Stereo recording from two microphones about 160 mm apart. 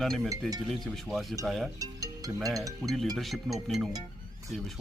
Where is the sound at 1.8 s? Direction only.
20° right (ahead or behind).